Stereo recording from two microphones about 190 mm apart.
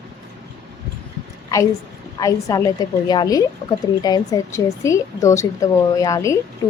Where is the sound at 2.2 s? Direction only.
20° left (ahead or behind).